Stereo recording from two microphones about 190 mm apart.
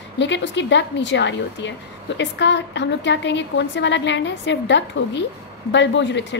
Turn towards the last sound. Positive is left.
turn(degrees=70)  # may be behind; listen again after turning